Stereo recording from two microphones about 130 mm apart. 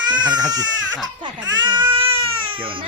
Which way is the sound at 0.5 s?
30° right (ahead or behind).